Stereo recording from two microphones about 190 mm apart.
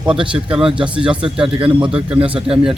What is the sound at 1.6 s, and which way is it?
Speech, 25° right (ahead or behind).